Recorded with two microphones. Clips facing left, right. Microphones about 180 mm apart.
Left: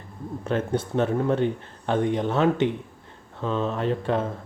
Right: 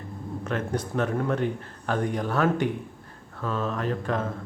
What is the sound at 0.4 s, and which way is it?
Speech, 30° left (ahead or behind).